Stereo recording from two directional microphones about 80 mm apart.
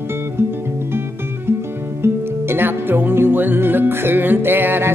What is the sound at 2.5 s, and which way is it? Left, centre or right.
Music, right.